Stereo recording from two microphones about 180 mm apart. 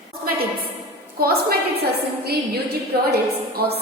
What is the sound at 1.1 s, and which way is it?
Speech, 55° right (ahead or behind).